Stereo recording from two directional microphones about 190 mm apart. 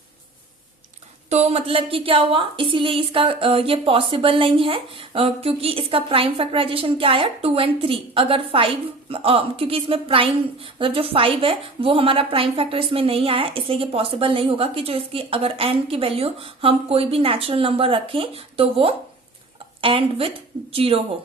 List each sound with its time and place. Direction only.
1.3 s a woman's voice: 35° right (ahead or behind)